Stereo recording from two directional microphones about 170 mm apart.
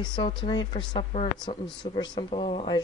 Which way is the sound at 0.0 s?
25° left (ahead or behind).